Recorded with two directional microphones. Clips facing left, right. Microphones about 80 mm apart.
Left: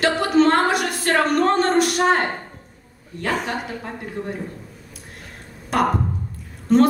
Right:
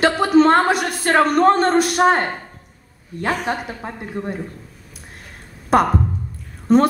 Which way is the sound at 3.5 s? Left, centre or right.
Right.